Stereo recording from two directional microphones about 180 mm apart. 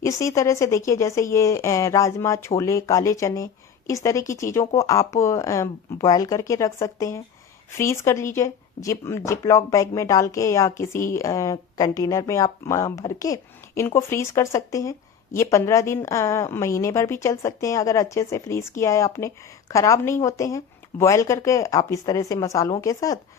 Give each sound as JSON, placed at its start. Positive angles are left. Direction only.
{"t": 0.0, "sound": "speech", "side_deg": 15}